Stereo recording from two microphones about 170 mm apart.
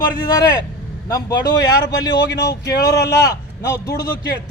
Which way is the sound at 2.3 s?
80° left.